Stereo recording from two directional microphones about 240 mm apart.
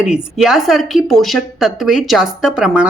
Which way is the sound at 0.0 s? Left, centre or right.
Centre.